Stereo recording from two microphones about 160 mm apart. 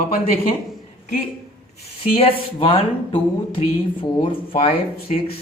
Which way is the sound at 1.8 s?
40° left (ahead or behind).